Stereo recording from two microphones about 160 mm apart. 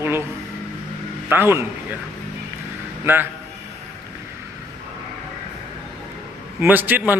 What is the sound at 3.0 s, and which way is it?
Speech, 10° right (ahead or behind).